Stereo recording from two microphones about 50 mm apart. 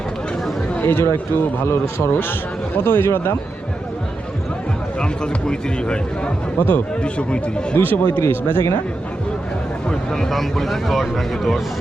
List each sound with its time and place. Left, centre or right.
0.9 s speech: left
2.7 s speech: left
4.9 s speech: centre
6.6 s speech: left
7.0 s speech: left
7.8 s speech: left
9.9 s speech: centre